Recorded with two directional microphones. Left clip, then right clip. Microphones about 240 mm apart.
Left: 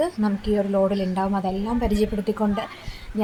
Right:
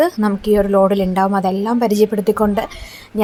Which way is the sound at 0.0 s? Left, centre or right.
Right.